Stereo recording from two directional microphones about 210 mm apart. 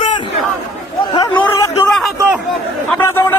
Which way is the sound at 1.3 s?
10° left (ahead or behind).